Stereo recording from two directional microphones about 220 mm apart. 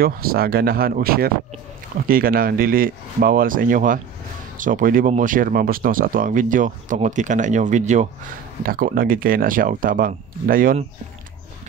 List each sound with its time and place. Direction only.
0.0 s speech: 45° right (ahead or behind)